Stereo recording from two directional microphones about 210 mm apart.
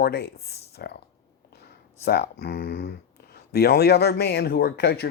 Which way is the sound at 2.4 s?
50° left (ahead or behind).